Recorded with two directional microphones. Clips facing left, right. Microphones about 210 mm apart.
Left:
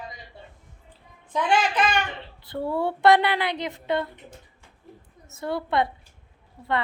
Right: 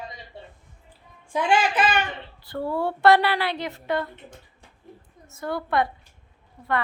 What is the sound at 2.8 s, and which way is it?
A woman's voice, 20° left (ahead or behind).